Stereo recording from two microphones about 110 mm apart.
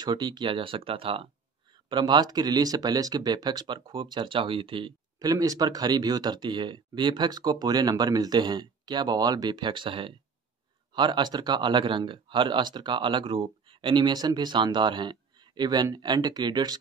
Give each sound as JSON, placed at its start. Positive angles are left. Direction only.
{"t": 0.0, "sound": "speech", "side_deg": -40}
{"t": 1.9, "sound": "speech", "side_deg": -40}
{"t": 5.2, "sound": "speech", "side_deg": -30}